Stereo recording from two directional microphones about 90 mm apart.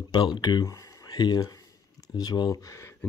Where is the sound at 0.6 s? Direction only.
35° left (ahead or behind).